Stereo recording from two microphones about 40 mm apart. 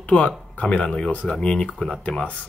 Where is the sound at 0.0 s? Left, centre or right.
Left.